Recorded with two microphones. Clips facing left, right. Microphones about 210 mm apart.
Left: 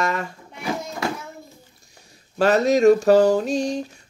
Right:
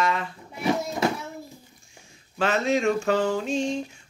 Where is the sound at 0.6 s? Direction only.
25° right (ahead or behind).